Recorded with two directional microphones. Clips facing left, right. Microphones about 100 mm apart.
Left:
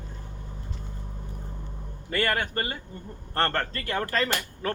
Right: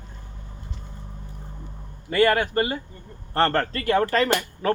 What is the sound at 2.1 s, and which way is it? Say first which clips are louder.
A man's voice: right 7 dB; 15° right (ahead or behind).